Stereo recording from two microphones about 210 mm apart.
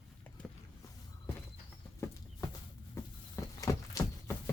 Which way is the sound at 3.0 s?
15° left (ahead or behind).